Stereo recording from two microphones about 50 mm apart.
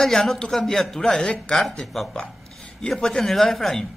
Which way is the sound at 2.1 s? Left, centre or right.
Centre.